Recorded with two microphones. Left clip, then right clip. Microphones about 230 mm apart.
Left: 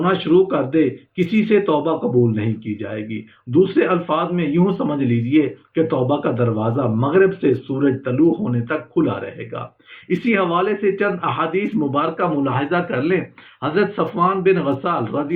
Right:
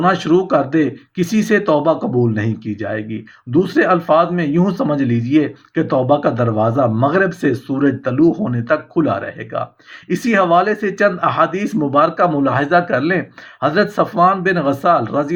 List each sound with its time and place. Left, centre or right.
0.0 s speech: right